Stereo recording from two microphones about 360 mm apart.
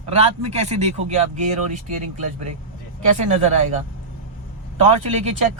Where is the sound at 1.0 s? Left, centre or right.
Centre.